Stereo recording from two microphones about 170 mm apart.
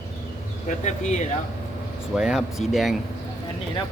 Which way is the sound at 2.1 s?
5° right (ahead or behind).